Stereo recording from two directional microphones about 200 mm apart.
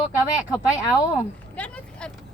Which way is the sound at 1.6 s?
5° left (ahead or behind).